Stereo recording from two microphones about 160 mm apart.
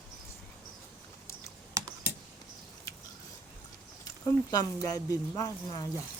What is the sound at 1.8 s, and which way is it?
Computer keyboard, 20° right (ahead or behind).